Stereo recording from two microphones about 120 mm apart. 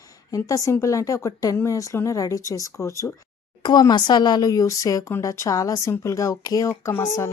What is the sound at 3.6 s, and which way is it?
Speech, 35° left (ahead or behind).